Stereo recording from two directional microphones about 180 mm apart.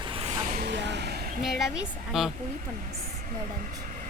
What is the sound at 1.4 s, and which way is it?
Speech, centre (ahead or behind).